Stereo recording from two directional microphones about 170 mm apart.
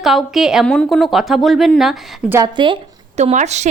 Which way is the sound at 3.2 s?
40° right (ahead or behind).